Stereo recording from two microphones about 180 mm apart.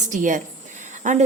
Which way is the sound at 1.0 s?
40° right (ahead or behind).